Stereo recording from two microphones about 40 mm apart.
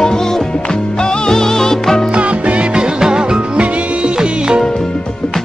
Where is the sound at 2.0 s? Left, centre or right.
Right.